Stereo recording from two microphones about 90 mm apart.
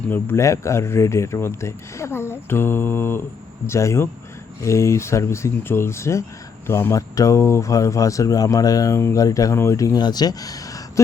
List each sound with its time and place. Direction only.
0.1 s speech: 25° left (ahead or behind)
10.0 s speech: 50° left (ahead or behind)